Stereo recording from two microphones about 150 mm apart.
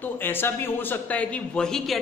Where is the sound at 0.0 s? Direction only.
15° left (ahead or behind).